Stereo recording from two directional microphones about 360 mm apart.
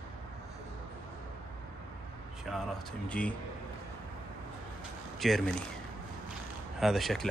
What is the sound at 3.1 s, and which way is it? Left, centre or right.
Speech, centre.